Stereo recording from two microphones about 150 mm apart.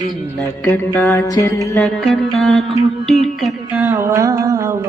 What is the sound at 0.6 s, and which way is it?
Music, 10° left (ahead or behind).